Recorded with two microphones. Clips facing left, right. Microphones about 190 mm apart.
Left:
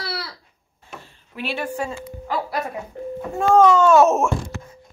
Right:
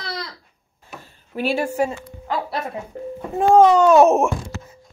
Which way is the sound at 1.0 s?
40° right (ahead or behind).